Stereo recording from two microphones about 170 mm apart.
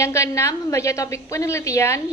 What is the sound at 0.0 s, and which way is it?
A woman's voice, 15° left (ahead or behind).